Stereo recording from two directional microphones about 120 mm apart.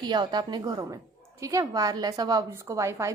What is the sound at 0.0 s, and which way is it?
A woman's voice, 35° right (ahead or behind).